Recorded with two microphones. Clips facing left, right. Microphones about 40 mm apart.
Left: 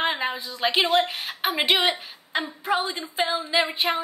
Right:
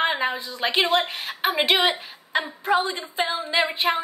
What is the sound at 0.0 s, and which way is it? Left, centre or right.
A woman's voice, centre.